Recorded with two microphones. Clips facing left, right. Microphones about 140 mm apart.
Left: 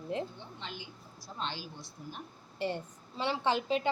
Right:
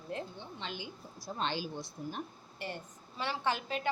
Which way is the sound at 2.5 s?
25° left (ahead or behind).